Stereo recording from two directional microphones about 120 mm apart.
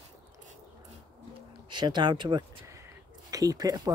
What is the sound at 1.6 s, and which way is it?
Speech, 40° right (ahead or behind).